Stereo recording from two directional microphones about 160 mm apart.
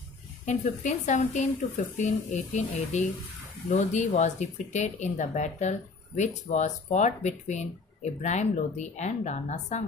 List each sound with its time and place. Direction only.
0.5 s speech: 50° left (ahead or behind)